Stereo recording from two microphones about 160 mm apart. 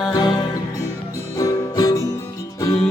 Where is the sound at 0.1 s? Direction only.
25° left (ahead or behind).